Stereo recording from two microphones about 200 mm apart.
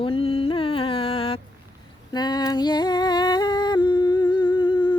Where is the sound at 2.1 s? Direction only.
20° left (ahead or behind).